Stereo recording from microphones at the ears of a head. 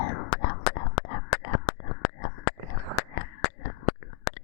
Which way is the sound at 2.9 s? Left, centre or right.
Left.